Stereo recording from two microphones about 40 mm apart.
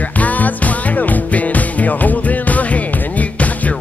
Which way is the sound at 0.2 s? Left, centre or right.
Left.